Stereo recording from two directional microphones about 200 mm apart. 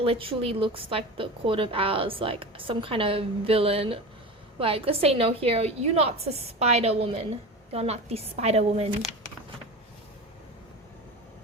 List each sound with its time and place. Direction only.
0.0 s a woman's voice: 25° right (ahead or behind)